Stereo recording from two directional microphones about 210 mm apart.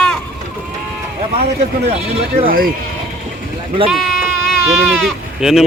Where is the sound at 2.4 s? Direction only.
45° right (ahead or behind).